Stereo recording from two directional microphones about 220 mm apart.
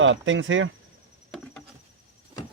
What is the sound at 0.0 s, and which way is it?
Speech, 60° right (ahead or behind).